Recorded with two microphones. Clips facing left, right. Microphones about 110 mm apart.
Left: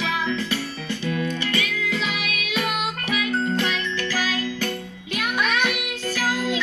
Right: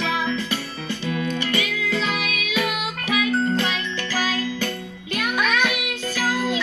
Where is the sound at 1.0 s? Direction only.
20° right (ahead or behind).